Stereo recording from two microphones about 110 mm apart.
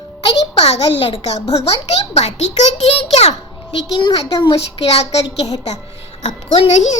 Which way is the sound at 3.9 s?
45° left (ahead or behind).